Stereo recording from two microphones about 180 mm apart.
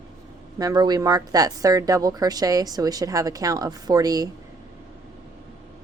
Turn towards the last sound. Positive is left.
turn(degrees=-20)  # may be behind; listen again after turning